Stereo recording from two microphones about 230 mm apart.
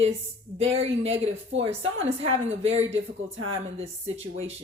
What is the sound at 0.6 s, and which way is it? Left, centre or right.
Speech, right.